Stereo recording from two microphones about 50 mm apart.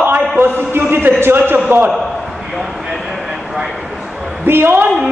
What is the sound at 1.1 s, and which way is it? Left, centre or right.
Speech, right.